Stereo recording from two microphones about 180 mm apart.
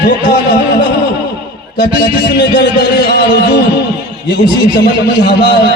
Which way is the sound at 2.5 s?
65° left (ahead or behind).